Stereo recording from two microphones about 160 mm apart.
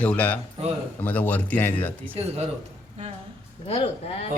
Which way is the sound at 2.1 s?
40° right (ahead or behind).